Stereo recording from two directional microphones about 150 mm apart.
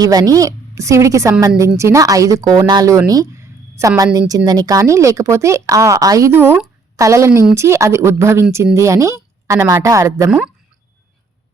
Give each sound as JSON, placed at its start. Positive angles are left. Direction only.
{"t": 0.0, "sound": "a woman's voice", "side_deg": -25}
{"t": 3.1, "sound": "a sound", "side_deg": -20}
{"t": 4.3, "sound": "a woman's voice", "side_deg": -25}
{"t": 10.2, "sound": "speech", "side_deg": -5}